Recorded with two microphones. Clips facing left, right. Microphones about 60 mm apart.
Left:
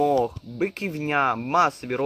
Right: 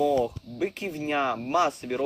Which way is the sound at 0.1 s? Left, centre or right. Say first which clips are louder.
Left 3 dB; left.